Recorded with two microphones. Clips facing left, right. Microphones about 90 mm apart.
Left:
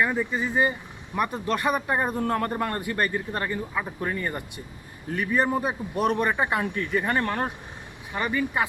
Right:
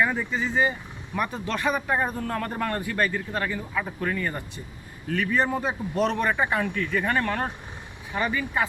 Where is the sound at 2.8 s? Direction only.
20° left (ahead or behind).